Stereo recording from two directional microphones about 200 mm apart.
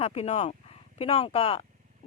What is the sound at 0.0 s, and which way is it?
Speech, 30° left (ahead or behind).